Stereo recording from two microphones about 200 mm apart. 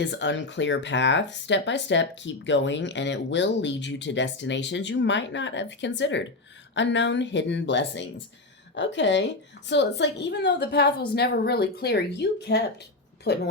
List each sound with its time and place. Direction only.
0.0 s speech: 60° left (ahead or behind)